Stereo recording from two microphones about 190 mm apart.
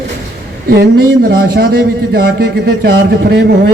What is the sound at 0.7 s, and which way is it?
Speech, 55° right (ahead or behind).